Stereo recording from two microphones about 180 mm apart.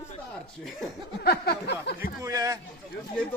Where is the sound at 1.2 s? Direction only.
60° left (ahead or behind).